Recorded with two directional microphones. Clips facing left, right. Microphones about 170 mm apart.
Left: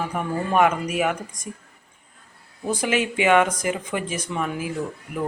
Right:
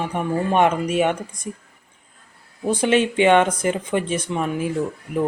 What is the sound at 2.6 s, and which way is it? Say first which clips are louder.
Speech: right 5 dB; 30° right (ahead or behind).